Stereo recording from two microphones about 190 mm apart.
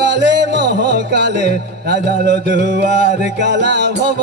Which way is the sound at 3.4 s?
65° right (ahead or behind).